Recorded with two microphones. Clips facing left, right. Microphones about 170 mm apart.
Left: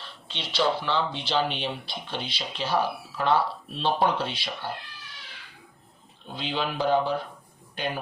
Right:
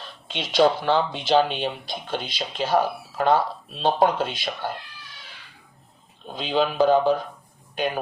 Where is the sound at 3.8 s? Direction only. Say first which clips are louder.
Right 4 dB; 45° right (ahead or behind).